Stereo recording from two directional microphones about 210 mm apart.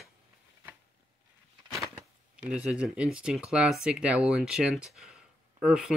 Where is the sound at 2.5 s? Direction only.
5° right (ahead or behind).